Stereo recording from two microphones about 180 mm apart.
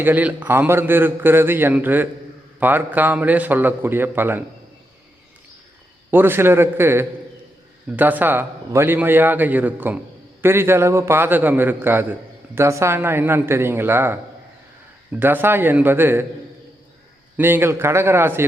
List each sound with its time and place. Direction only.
0.0 s a man's voice: 10° right (ahead or behind)
6.1 s a man's voice: 10° right (ahead or behind)
17.3 s a man's voice: 10° right (ahead or behind)